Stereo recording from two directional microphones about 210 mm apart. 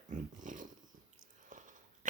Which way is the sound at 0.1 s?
40° right (ahead or behind).